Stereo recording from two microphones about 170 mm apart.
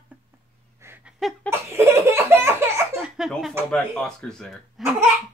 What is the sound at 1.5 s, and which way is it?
Laughter, 15° right (ahead or behind).